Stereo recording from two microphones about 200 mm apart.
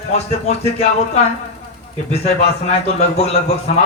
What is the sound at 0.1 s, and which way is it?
A man's voice, 35° left (ahead or behind).